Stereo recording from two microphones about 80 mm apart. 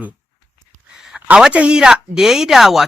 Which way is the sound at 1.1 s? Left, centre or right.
Centre.